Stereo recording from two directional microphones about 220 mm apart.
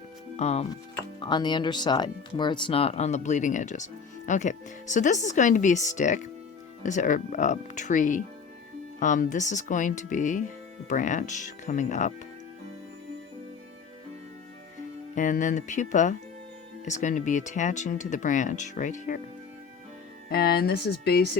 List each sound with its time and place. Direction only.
0.3 s speech: 30° left (ahead or behind)
15.1 s speech: 35° left (ahead or behind)
20.3 s speech: 45° left (ahead or behind)